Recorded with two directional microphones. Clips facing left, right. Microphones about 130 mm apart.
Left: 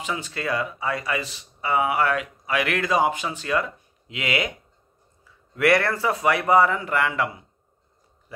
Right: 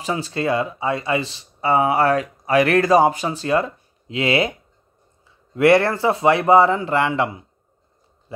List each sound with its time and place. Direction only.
0.0 s speech: 35° right (ahead or behind)